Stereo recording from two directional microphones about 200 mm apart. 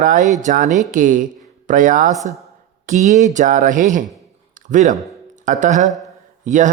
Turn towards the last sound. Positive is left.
turn(degrees=-40)  # may be behind; listen again after turning